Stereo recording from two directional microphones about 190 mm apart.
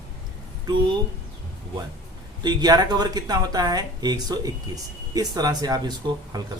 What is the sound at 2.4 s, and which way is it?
Speech, 20° right (ahead or behind).